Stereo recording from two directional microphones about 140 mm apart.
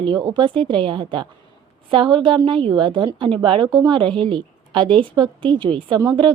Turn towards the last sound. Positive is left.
turn(degrees=-30)  # may be behind; listen again after turning